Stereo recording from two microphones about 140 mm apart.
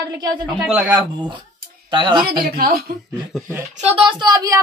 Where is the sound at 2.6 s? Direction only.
90° right.